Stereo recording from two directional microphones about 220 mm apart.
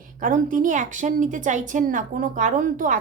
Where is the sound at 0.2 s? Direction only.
40° right (ahead or behind).